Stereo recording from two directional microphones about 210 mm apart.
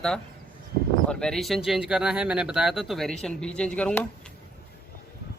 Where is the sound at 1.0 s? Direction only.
5° left (ahead or behind).